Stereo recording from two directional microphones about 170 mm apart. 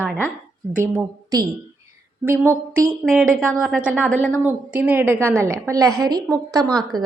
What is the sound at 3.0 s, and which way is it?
A woman's voice, 5° right (ahead or behind).